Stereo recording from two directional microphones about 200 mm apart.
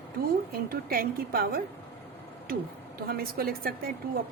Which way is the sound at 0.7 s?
50° right (ahead or behind).